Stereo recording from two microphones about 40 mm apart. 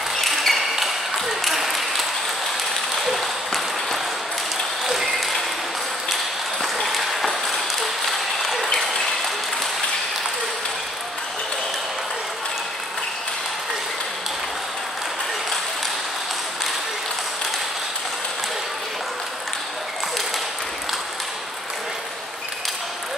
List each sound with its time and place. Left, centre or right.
0.2 s ping: centre
3.0 s applause: centre
6.6 s applause: centre